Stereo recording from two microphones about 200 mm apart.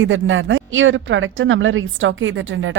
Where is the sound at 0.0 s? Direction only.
75° right (ahead or behind).